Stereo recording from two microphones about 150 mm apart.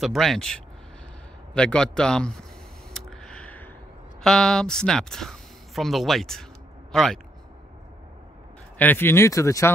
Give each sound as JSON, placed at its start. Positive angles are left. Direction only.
{"t": 0.0, "sound": "a man's voice", "side_deg": 0}
{"t": 2.9, "sound": "a sound", "side_deg": 0}
{"t": 4.2, "sound": "speech", "side_deg": 5}
{"t": 8.7, "sound": "speech", "side_deg": 10}